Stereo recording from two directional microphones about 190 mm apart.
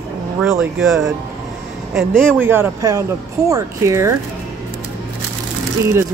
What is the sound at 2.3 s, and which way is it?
Speech, 10° right (ahead or behind).